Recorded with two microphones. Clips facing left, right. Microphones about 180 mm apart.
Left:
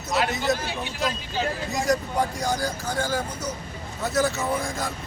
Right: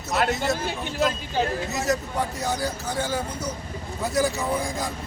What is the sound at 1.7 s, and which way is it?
Speech, 5° right (ahead or behind).